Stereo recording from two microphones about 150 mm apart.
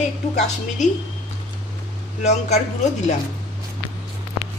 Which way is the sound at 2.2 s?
50° left (ahead or behind).